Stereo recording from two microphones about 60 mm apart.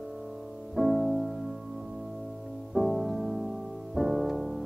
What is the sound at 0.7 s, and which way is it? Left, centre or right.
Music, centre.